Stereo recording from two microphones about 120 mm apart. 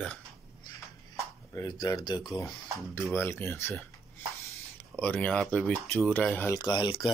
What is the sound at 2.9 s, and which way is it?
Speech, 20° left (ahead or behind).